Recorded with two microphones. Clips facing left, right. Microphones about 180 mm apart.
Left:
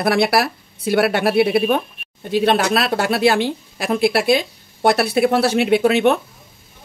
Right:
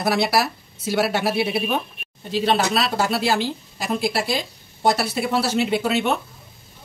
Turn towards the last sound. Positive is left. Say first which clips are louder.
# left 7 dB
turn(degrees=60)  # may be behind; listen again after turning